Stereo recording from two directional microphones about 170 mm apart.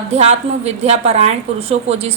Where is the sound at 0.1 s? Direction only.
40° right (ahead or behind).